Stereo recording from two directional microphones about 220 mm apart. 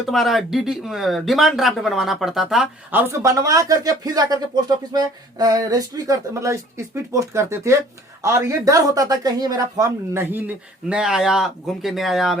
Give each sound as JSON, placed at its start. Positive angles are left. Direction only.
{"t": 0.0, "sound": "speech", "side_deg": 0}